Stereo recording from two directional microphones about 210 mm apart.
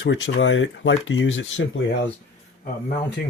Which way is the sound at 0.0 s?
60° left (ahead or behind).